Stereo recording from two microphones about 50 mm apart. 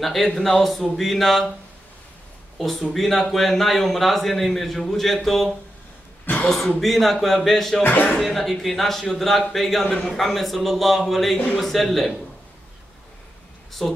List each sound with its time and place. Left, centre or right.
0.0 s speech: centre
2.6 s speech: centre
6.8 s speech: centre
7.8 s speech: left
8.2 s speech: centre
13.8 s speech: centre